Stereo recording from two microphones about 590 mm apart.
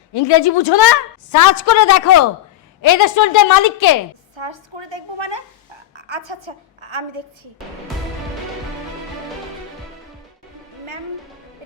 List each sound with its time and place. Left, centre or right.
0.1 s a woman's voice: left
4.4 s a woman's voice: right